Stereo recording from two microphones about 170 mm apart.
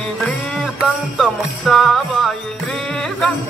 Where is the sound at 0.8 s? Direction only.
Centre (ahead or behind).